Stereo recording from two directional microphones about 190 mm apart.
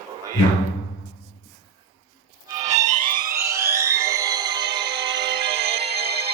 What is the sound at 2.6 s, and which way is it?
Music, 20° right (ahead or behind).